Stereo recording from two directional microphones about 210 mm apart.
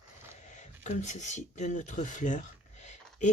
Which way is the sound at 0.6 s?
35° left (ahead or behind).